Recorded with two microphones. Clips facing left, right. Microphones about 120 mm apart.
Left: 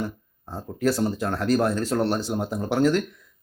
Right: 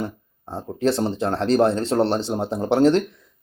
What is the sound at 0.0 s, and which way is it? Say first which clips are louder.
Speech: right 2 dB; 25° right (ahead or behind).